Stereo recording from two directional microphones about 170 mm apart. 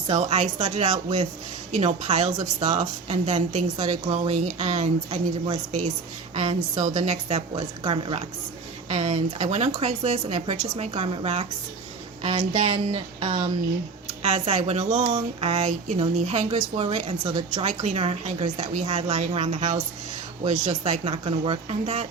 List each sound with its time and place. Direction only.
0.1 s a woman's voice: 40° right (ahead or behind)